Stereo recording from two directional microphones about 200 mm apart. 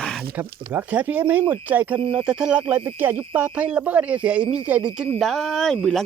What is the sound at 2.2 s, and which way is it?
Speech, 5° right (ahead or behind).